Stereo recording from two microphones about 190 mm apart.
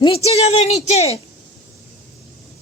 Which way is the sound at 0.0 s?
30° left (ahead or behind).